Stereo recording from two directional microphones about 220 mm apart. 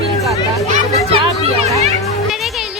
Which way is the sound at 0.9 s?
25° right (ahead or behind).